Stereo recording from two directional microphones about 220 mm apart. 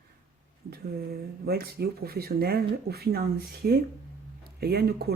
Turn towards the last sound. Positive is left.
turn(degrees=-45)  # may be behind; listen again after turning